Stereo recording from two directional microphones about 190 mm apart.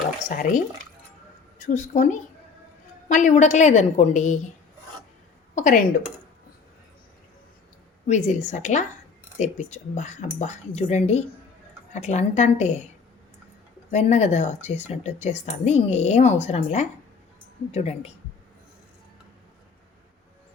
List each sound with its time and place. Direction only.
0.3 s a woman's voice: 45° left (ahead or behind)
5.5 s speech: 40° left (ahead or behind)
8.0 s speech: 40° left (ahead or behind)
13.9 s speech: 35° left (ahead or behind)